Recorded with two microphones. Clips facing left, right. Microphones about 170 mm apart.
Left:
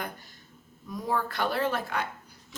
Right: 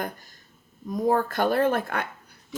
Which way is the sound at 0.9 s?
45° right (ahead or behind).